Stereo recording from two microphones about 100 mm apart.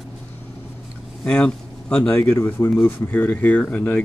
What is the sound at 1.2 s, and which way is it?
Speech, 10° left (ahead or behind).